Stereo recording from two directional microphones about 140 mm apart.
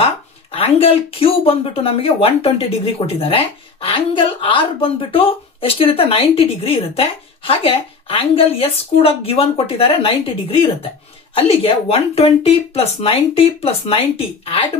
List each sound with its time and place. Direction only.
0.0 s speech: 45° left (ahead or behind)
11.3 s speech: 45° left (ahead or behind)